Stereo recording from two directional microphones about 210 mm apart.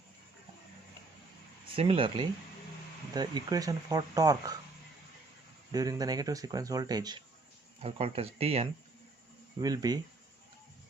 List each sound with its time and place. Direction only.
1.7 s speech: 25° right (ahead or behind)
5.7 s speech: 15° right (ahead or behind)
9.6 s speech: 20° right (ahead or behind)